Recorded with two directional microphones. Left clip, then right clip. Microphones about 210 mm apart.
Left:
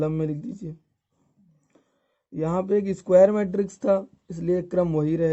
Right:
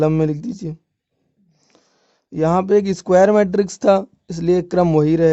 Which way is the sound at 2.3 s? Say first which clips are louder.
Right 9 dB; 40° right (ahead or behind).